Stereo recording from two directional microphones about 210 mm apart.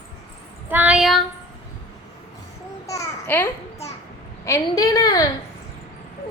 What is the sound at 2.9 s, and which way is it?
Babbling, 10° left (ahead or behind).